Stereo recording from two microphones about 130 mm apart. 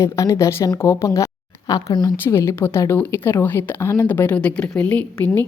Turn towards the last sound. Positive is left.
turn(degrees=10)  # may be behind; listen again after turning